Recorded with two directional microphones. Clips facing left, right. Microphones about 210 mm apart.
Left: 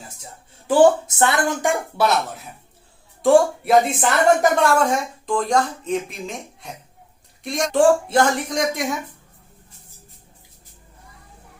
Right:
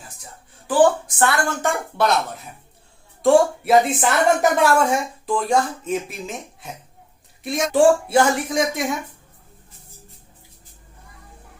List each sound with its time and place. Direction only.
0.7 s speech: 25° left (ahead or behind)
2.0 s a woman's voice: 5° left (ahead or behind)
3.2 s a woman's voice: centre (ahead or behind)